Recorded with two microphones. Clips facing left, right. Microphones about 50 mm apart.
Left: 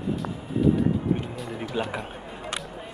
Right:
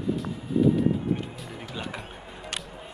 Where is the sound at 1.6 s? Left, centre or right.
Centre.